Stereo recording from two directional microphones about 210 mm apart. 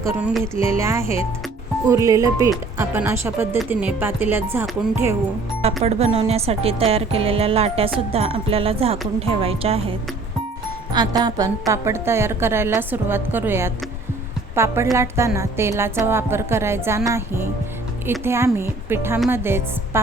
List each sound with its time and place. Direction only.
0.0 s a woman's voice: 5° right (ahead or behind)
5.6 s speech: 30° right (ahead or behind)
10.9 s a woman's voice: 20° right (ahead or behind)